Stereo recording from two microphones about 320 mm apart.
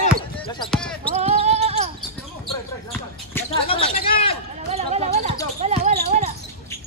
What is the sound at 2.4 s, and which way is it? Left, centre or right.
Speech, centre.